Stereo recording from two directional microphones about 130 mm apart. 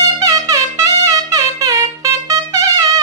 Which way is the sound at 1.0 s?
25° right (ahead or behind).